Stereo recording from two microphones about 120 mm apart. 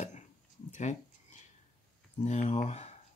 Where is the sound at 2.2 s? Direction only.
70° left (ahead or behind).